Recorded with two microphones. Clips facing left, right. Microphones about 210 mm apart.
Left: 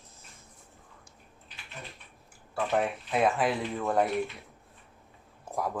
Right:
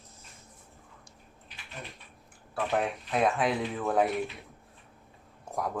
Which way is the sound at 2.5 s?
Centre (ahead or behind).